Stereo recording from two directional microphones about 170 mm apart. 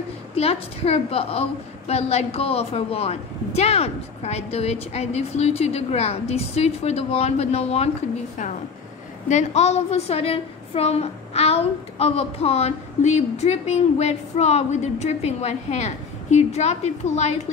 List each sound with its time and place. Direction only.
0.3 s a woman's voice: 35° left (ahead or behind)
9.3 s a woman's voice: 40° left (ahead or behind)